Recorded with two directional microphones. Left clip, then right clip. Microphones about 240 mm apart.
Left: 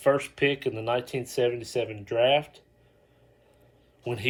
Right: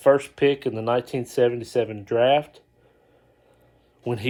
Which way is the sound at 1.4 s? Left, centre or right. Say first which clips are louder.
Right 6 dB; centre.